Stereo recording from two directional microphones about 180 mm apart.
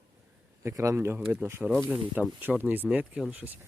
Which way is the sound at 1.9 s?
10° right (ahead or behind).